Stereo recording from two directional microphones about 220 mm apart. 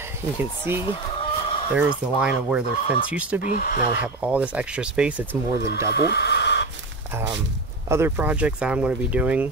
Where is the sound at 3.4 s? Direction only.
40° left (ahead or behind).